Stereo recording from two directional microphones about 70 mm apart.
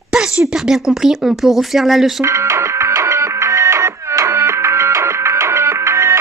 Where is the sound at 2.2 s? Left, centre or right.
Right.